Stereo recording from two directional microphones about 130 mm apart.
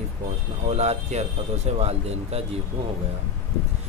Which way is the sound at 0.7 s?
55° right (ahead or behind).